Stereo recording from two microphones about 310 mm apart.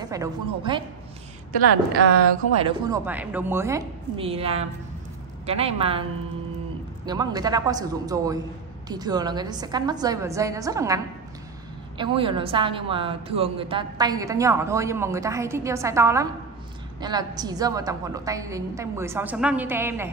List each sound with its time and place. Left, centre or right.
0.0 s a woman's voice: centre
2.6 s a woman's voice: centre
7.1 s a woman's voice: centre
12.0 s a woman's voice: centre